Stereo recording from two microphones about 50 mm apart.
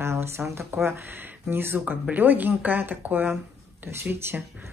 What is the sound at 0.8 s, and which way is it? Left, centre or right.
Speech, right.